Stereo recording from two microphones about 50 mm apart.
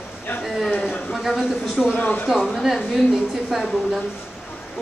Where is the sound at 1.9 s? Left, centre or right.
Left.